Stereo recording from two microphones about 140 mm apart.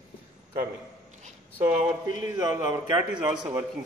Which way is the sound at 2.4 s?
30° right (ahead or behind).